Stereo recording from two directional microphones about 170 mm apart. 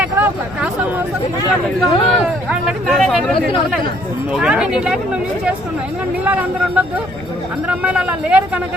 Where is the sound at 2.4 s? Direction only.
Centre (ahead or behind).